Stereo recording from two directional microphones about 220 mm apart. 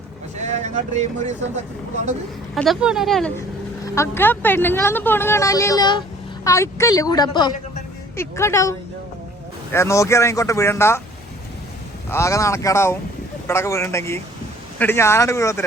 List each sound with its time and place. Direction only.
0.3 s speech: 30° right (ahead or behind)
2.6 s a woman's voice: centre (ahead or behind)
9.7 s speech: 15° left (ahead or behind)
12.1 s speech: 15° left (ahead or behind)